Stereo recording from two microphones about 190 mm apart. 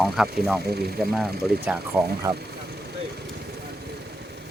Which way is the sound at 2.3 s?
15° right (ahead or behind).